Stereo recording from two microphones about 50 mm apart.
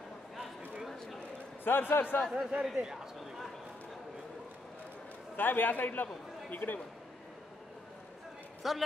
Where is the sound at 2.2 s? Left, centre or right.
Centre.